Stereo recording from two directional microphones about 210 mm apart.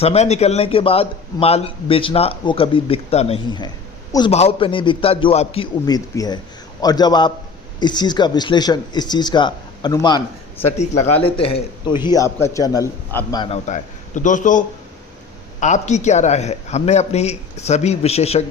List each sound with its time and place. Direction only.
0.0 s a man's voice: 30° left (ahead or behind)
13.5 s speech: 35° left (ahead or behind)
15.6 s speech: 35° left (ahead or behind)